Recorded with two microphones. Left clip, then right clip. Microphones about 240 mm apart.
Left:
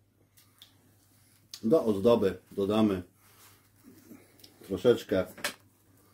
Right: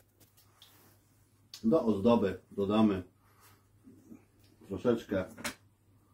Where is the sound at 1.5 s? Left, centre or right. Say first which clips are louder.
Left 3 dB; left.